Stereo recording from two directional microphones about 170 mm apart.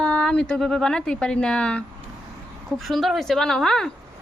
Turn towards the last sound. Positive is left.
turn(degrees=5)  # may be behind; listen again after turning